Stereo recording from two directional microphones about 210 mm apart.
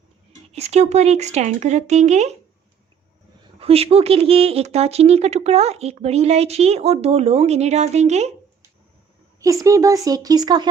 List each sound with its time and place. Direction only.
0.5 s speech: 30° right (ahead or behind)
3.6 s speech: 30° right (ahead or behind)
9.4 s speech: 15° right (ahead or behind)